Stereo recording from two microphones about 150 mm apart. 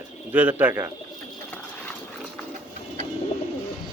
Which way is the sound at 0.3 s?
10° right (ahead or behind).